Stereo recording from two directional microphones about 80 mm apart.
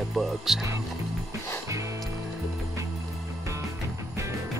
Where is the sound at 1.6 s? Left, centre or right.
Right.